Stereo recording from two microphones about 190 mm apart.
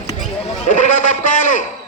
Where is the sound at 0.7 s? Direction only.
40° left (ahead or behind).